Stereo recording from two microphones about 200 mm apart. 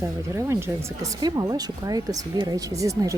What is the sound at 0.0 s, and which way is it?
Speech, 15° right (ahead or behind).